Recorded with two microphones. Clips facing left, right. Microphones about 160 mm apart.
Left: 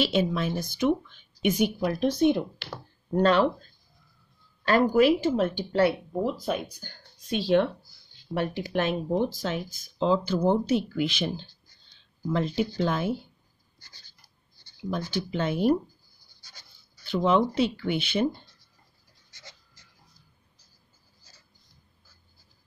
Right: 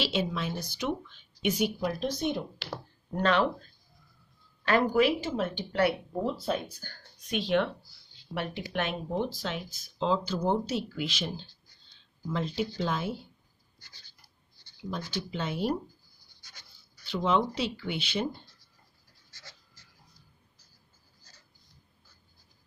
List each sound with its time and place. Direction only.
0.0 s speech: 50° left (ahead or behind)
3.2 s speech: 35° left (ahead or behind)
4.6 s speech: 40° left (ahead or behind)
5.8 s speech: 25° left (ahead or behind)
6.4 s speech: 15° left (ahead or behind)
7.2 s speech: 35° left (ahead or behind); by 13.1 s 55° left (ahead or behind)
13.7 s writing: 40° left (ahead or behind)
15.0 s speech: 55° left (ahead or behind)
16.3 s a sound: 35° left (ahead or behind)
17.0 s speech: 50° left (ahead or behind)
19.3 s a sound: 20° left (ahead or behind)